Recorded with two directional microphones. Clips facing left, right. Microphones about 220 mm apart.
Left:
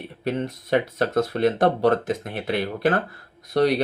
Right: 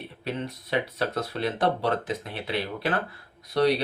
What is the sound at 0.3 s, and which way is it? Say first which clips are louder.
Speech: left 7 dB; 50° left (ahead or behind).